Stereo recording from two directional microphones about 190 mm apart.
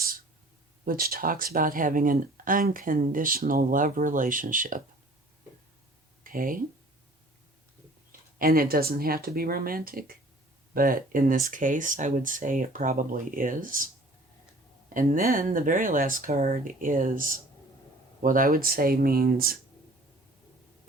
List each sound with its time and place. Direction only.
0.9 s speech: 50° right (ahead or behind)
6.2 s speech: 45° right (ahead or behind)
8.4 s speech: 50° right (ahead or behind)
14.9 s speech: 45° right (ahead or behind)